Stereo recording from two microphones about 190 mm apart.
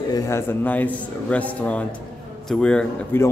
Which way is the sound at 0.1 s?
15° left (ahead or behind).